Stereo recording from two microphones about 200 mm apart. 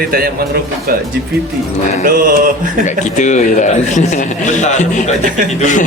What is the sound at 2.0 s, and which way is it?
Speech, 45° right (ahead or behind).